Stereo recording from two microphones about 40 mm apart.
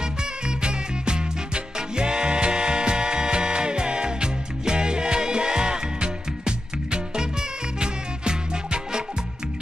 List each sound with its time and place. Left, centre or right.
0.0 s music: right